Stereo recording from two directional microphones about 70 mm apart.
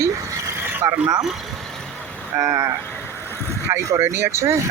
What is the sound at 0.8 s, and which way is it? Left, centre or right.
Speech, right.